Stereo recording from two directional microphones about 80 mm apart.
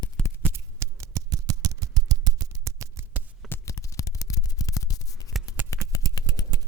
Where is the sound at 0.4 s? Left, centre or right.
Right.